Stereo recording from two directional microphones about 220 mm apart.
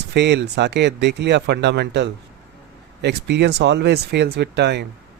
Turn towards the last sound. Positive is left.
turn(degrees=-50)  # may be behind; listen again after turning